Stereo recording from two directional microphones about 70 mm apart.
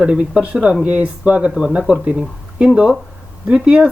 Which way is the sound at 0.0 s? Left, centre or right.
Centre.